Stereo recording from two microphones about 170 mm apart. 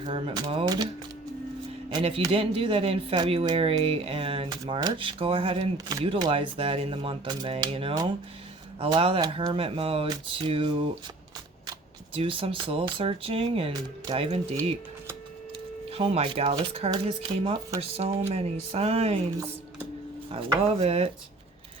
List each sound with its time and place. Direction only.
0.0 s speech: 30° right (ahead or behind)
1.9 s speech: 30° right (ahead or behind)
12.1 s speech: 35° right (ahead or behind)
15.9 s speech: 35° right (ahead or behind)
20.3 s speech: 35° right (ahead or behind)